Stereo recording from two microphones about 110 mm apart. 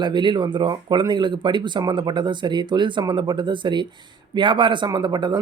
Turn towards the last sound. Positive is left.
turn(degrees=-40)  # may be behind; listen again after turning